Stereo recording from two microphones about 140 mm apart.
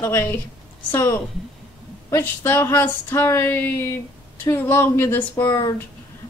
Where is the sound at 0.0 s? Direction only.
15° left (ahead or behind).